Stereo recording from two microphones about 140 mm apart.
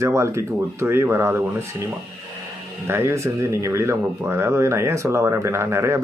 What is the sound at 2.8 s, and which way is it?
Speech, 20° right (ahead or behind).